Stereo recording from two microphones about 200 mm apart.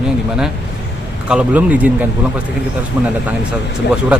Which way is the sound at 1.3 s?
5° right (ahead or behind).